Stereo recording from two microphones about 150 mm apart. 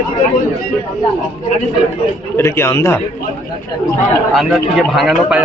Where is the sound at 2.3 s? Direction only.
15° left (ahead or behind).